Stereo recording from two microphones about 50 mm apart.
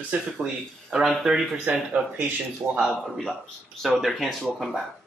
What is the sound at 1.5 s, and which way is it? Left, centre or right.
Speech, right.